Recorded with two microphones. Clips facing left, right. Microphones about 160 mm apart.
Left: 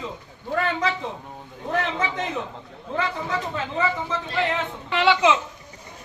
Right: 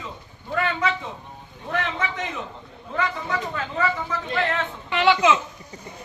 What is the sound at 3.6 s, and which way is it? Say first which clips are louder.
Speech: left 1 dB; 20° left (ahead or behind).